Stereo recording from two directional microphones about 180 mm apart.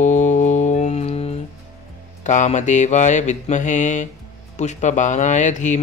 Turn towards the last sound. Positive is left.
turn(degrees=45)  # may be behind; listen again after turning